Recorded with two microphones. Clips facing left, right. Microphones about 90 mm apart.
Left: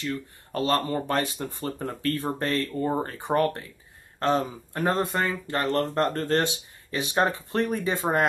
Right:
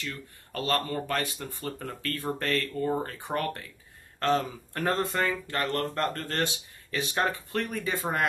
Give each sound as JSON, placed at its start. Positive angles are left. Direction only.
{"t": 0.0, "sound": "speech", "side_deg": 30}
{"t": 4.2, "sound": "speech", "side_deg": 20}